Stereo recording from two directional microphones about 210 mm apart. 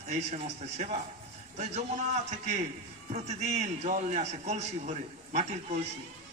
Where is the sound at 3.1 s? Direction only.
35° right (ahead or behind).